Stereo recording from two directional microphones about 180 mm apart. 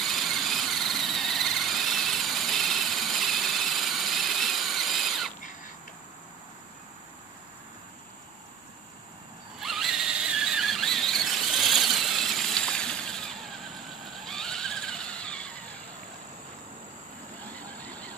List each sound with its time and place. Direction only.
0.0 s engine: centre (ahead or behind)
9.6 s squeal: centre (ahead or behind)
17.6 s vehicle: 10° left (ahead or behind)